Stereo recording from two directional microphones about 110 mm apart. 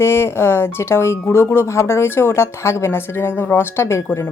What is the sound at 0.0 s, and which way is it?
Speech, 20° left (ahead or behind).